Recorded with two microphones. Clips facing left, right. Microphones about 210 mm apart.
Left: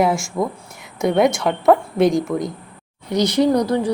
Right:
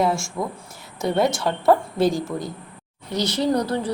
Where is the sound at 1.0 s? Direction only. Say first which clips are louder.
Left 4 dB; 15° left (ahead or behind).